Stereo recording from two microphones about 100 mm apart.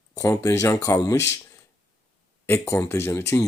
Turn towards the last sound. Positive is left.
turn(degrees=25)  # may be behind; listen again after turning